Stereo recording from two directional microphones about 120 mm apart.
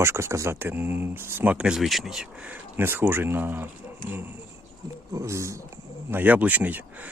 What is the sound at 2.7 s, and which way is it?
Speech, 20° right (ahead or behind).